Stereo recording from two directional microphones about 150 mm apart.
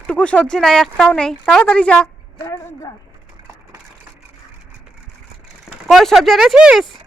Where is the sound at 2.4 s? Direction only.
25° left (ahead or behind).